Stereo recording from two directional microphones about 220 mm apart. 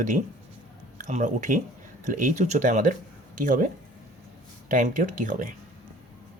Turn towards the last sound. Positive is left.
turn(degrees=-35)  # may be behind; listen again after turning